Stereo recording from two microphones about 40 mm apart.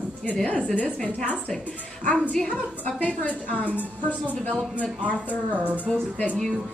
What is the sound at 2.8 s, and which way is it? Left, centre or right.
Speech, left.